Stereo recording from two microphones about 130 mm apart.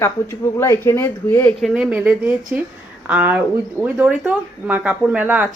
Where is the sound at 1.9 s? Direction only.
10° right (ahead or behind).